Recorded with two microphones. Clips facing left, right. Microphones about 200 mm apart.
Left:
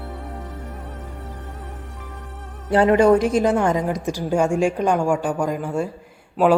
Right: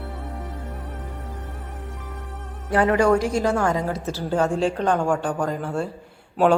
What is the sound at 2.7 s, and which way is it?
A woman's voice, 25° left (ahead or behind).